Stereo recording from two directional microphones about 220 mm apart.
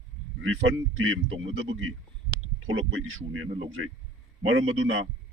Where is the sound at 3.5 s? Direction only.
30° right (ahead or behind).